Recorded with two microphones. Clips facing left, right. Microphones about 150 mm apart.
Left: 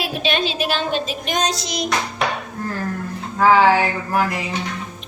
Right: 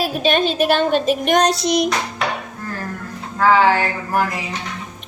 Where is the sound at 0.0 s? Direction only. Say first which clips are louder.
Right 4 dB; 45° right (ahead or behind); by 1.9 s 60° right (ahead or behind).